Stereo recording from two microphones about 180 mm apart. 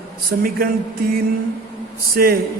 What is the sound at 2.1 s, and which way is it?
Speech, 55° right (ahead or behind).